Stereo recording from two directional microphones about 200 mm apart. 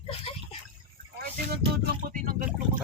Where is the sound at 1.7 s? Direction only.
50° right (ahead or behind).